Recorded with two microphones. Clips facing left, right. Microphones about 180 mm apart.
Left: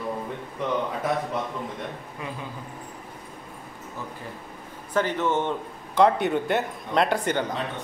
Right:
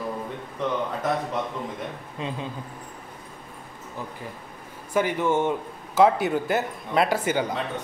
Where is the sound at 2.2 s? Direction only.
20° right (ahead or behind).